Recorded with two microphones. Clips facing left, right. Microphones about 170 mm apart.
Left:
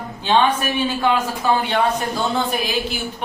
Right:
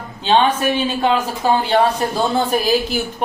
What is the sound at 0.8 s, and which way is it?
Speech, 25° right (ahead or behind).